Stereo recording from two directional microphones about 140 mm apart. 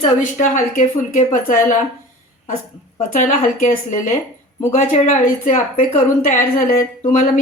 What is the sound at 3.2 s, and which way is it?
Speech, 70° left (ahead or behind).